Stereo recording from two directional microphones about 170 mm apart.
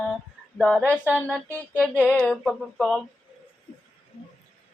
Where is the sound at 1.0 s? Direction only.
5° right (ahead or behind).